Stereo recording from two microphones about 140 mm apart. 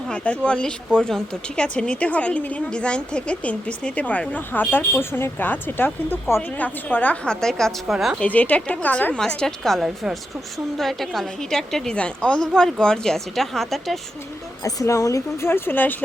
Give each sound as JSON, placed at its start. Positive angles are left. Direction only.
{"t": 0.1, "sound": "a woman's voice", "side_deg": 5}
{"t": 8.2, "sound": "a woman's voice", "side_deg": 10}
{"t": 14.6, "sound": "a woman's voice", "side_deg": 20}